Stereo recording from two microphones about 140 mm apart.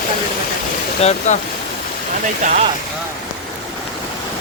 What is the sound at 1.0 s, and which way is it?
Speech, 55° left (ahead or behind).